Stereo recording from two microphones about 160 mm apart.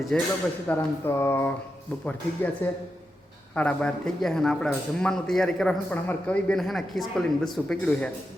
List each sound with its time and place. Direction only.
0.1 s a man's voice: 5° left (ahead or behind)
0.7 s a sound: 10° left (ahead or behind)
3.5 s a man's voice: 10° left (ahead or behind)